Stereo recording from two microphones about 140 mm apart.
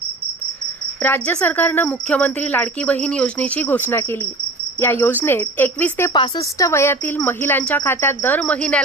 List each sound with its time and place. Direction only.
1.0 s a woman's voice: 10° left (ahead or behind)
6.1 s speech: 35° left (ahead or behind)
6.6 s a woman's voice: 20° left (ahead or behind)